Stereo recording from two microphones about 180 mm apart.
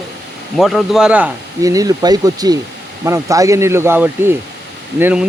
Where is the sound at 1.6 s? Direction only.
20° right (ahead or behind).